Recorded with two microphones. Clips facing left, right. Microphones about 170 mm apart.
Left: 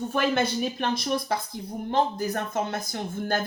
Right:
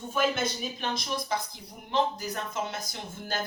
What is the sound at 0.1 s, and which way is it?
Speech, 60° left (ahead or behind).